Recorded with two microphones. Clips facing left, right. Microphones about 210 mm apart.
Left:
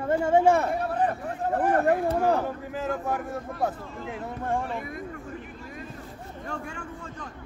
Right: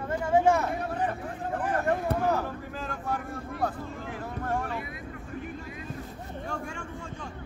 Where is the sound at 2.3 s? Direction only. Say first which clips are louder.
Left 3 dB; 20° left (ahead or behind).